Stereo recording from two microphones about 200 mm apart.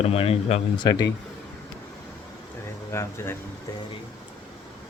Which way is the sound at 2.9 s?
15° left (ahead or behind).